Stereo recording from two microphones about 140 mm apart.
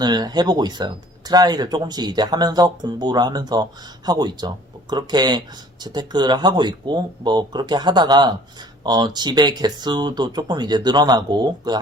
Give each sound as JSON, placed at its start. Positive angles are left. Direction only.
{"t": 0.0, "sound": "speech", "side_deg": -30}